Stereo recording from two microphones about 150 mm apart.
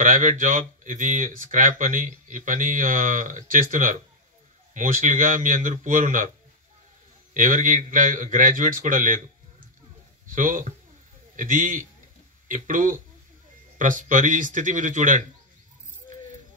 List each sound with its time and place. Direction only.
0.0 s speech: 60° right (ahead or behind)
7.3 s speech: 60° right (ahead or behind)
10.2 s a man's voice: 60° right (ahead or behind)